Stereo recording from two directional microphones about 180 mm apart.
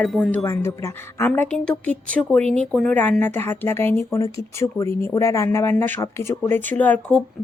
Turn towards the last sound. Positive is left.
turn(degrees=5)  # may be behind; listen again after turning